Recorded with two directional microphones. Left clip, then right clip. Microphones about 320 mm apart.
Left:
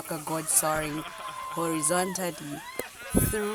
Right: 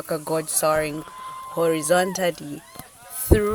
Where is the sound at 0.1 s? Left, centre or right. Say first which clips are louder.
Right 6 dB; centre.